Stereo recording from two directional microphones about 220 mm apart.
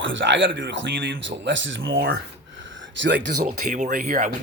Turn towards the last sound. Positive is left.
turn(degrees=-40)  # may be behind; listen again after turning